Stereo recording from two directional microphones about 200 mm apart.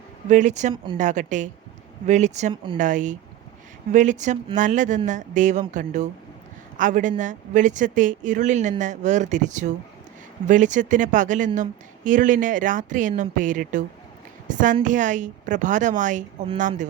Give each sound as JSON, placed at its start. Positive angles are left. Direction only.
{"t": 0.3, "sound": "speech", "side_deg": -35}